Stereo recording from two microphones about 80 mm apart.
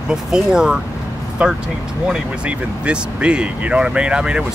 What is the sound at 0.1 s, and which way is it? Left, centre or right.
Speech, centre.